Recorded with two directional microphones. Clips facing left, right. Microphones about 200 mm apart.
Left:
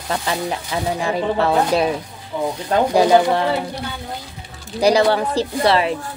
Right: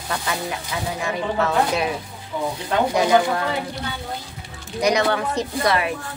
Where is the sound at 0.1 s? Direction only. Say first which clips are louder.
Left 4 dB; 30° left (ahead or behind).